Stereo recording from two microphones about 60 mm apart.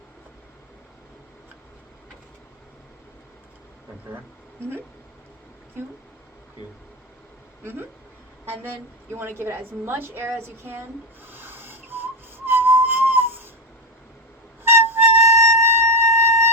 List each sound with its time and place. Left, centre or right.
7.6 s a woman's voice: right
9.4 s a woman's voice: right
11.3 s a sound: right
12.5 s whistling: right
14.6 s flute: right